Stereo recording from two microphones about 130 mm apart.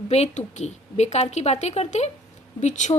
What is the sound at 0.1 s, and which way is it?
A woman's voice, 60° left (ahead or behind).